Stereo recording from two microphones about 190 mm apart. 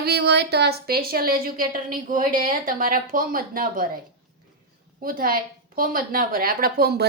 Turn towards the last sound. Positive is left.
turn(degrees=-55)  # may be behind; listen again after turning